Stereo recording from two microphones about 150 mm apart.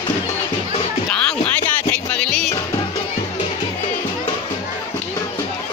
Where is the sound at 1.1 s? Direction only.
5° left (ahead or behind).